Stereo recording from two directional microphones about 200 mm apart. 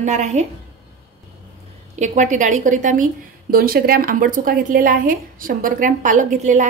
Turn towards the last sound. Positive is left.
turn(degrees=-40)  # may be behind; listen again after turning